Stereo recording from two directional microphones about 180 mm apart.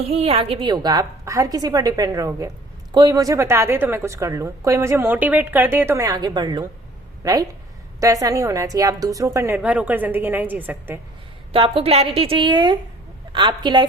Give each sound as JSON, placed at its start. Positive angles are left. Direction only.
{"t": 0.0, "sound": "a woman's voice", "side_deg": -35}
{"t": 11.5, "sound": "a woman's voice", "side_deg": -30}